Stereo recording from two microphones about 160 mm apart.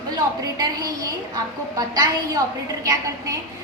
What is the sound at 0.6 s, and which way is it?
A woman's voice, 25° right (ahead or behind).